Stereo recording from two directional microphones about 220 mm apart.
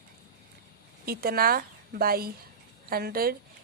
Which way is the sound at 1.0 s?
45° right (ahead or behind).